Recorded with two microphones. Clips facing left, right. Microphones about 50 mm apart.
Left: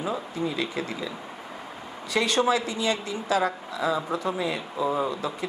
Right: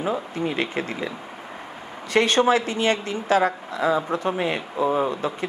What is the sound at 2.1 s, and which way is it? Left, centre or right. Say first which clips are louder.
A woman's voice: right 5 dB; right.